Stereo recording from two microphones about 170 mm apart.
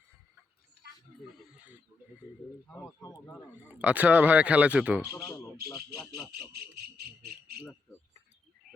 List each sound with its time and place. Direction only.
1.5 s a sound: 10° right (ahead or behind)
2.6 s speech: 10° left (ahead or behind)
3.7 s speech: 10° right (ahead or behind)
5.6 s speech: centre (ahead or behind)
6.5 s cricket: 65° right (ahead or behind)